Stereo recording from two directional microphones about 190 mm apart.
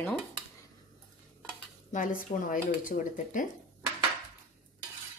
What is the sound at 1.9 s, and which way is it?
Speech, 45° left (ahead or behind).